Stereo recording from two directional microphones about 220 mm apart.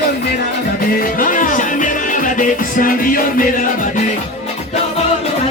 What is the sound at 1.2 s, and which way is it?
Music, 35° left (ahead or behind).